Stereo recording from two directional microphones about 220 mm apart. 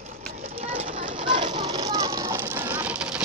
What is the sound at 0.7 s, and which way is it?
Vehicle, 25° right (ahead or behind).